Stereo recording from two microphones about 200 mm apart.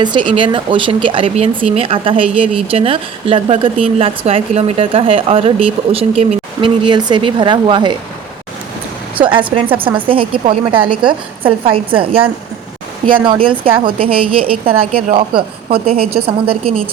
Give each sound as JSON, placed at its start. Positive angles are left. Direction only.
{"t": 0.0, "sound": "speech", "side_deg": -25}
{"t": 9.1, "sound": "speech", "side_deg": -25}